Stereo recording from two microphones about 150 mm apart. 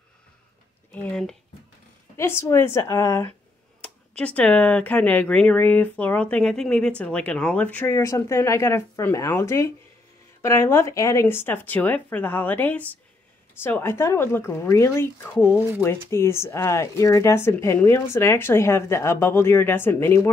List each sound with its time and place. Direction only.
0.9 s speech: 10° left (ahead or behind)
3.8 s speech: 10° left (ahead or behind)